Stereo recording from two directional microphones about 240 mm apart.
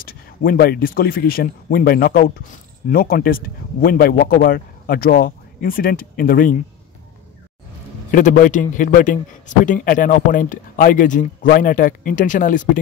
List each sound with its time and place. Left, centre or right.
0.0 s speech: left
8.1 s speech: left